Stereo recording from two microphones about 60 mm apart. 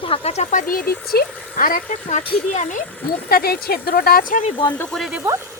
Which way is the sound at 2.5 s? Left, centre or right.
Left.